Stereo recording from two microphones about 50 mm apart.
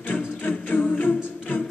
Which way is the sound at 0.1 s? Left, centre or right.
Left.